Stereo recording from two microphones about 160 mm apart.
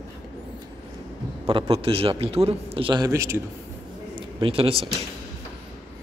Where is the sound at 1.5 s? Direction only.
35° right (ahead or behind).